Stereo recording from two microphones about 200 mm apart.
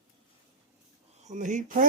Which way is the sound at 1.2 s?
40° right (ahead or behind).